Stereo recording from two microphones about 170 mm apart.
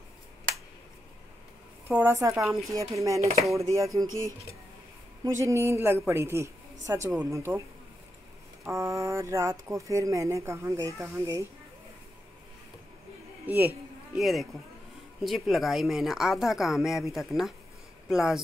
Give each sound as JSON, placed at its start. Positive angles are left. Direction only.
{"t": 1.9, "sound": "speech", "side_deg": -15}
{"t": 2.5, "sound": "speech", "side_deg": 0}
{"t": 2.8, "sound": "a sound", "side_deg": -20}
{"t": 3.2, "sound": "chopping", "side_deg": -35}
{"t": 3.5, "sound": "a sound", "side_deg": -20}
{"t": 5.2, "sound": "speech", "side_deg": -15}
{"t": 8.6, "sound": "speech", "side_deg": -20}
{"t": 13.5, "sound": "speech", "side_deg": -10}